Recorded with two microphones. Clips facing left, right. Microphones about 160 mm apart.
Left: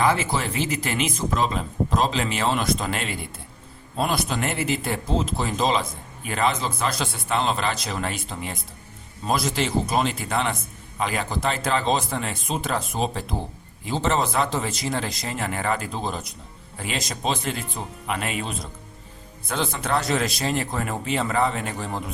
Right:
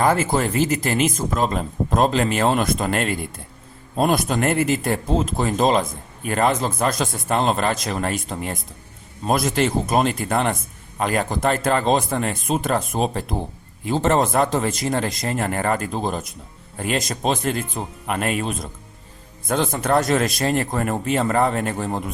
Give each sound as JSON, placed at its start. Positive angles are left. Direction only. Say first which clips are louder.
{"t": 0.0, "sound": "a man's voice", "louder": "right 4 dB", "side_deg": -45}